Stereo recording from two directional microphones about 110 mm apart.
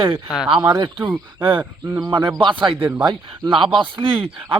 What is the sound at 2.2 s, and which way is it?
Speech, 45° right (ahead or behind).